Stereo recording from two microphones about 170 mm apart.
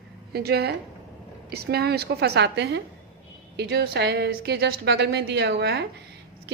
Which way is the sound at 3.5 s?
75° right (ahead or behind).